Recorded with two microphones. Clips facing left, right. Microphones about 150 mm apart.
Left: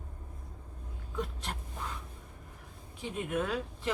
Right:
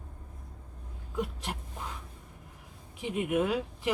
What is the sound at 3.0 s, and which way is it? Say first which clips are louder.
Speech: right 5 dB; 15° right (ahead or behind).